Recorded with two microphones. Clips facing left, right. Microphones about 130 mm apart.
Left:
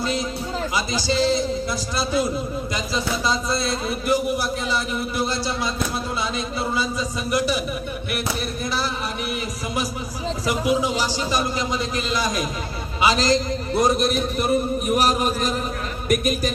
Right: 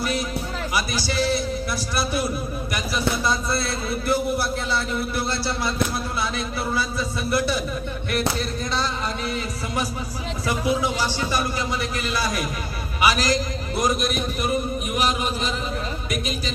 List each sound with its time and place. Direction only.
0.0 s a sound: 20° left (ahead or behind)
0.8 s a man's voice: 20° left (ahead or behind)
2.7 s speech: 20° left (ahead or behind)
7.3 s speech: 15° left (ahead or behind)
10.4 s a man's voice: 15° left (ahead or behind); by 16.5 s 50° left (ahead or behind)